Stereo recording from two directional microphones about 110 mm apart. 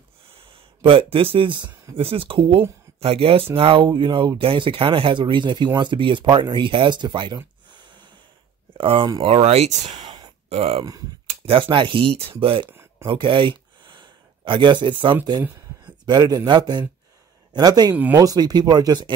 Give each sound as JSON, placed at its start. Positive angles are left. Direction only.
{"t": 0.4, "sound": "speech", "side_deg": -55}
{"t": 9.2, "sound": "speech", "side_deg": -65}
{"t": 10.0, "sound": "a sound", "side_deg": -45}
{"t": 10.5, "sound": "speech", "side_deg": -65}
{"t": 13.0, "sound": "a sound", "side_deg": -50}
{"t": 15.8, "sound": "a man's voice", "side_deg": -40}